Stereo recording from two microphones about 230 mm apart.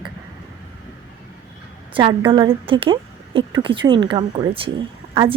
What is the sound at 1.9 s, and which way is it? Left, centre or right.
A woman's voice, right.